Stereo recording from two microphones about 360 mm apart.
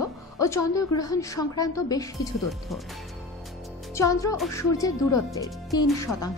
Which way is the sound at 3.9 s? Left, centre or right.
Centre.